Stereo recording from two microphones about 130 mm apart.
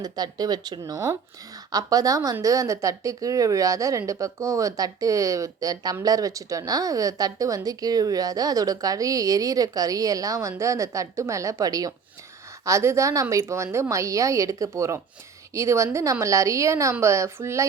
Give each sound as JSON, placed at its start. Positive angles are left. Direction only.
{"t": 0.0, "sound": "a woman's voice", "side_deg": -30}